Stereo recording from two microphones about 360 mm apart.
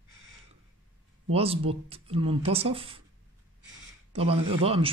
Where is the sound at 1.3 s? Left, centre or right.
Centre.